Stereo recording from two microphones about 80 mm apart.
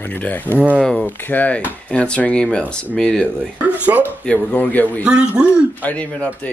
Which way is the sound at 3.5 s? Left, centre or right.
Right.